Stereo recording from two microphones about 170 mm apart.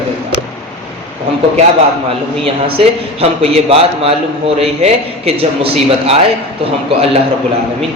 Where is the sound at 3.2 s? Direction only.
35° right (ahead or behind).